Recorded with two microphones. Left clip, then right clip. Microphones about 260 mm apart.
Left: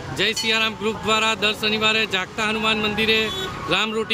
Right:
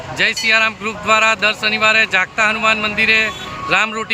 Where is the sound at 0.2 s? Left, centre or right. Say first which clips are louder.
Right 6 dB; centre.